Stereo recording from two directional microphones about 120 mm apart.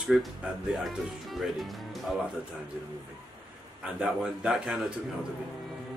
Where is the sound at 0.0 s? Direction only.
Centre (ahead or behind).